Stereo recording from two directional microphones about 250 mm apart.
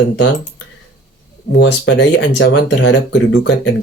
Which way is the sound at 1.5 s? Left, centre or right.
Left.